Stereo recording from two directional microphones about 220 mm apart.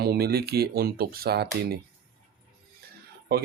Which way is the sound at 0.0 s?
45° right (ahead or behind).